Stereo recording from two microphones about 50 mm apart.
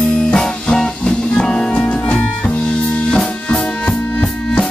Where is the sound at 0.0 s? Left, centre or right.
Centre.